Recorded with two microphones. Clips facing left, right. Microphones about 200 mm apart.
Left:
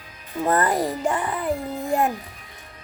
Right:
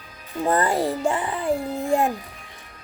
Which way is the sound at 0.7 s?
30° right (ahead or behind).